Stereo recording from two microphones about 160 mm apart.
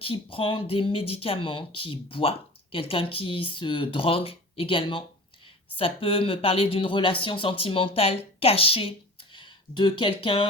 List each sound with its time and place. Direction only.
0.0 s speech: 35° left (ahead or behind)